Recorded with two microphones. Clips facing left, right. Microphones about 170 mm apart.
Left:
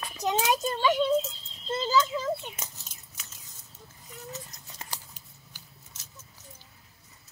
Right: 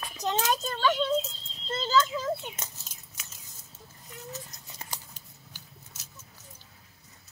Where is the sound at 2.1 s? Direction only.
Centre (ahead or behind).